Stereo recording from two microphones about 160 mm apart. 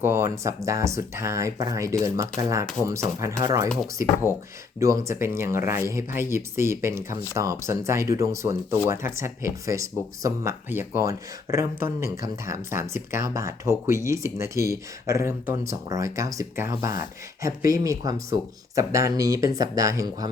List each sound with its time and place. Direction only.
0.0 s speech: 15° right (ahead or behind)
3.4 s speech: 20° right (ahead or behind)